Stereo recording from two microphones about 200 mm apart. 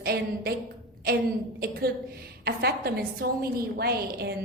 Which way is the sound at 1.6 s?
50° right (ahead or behind).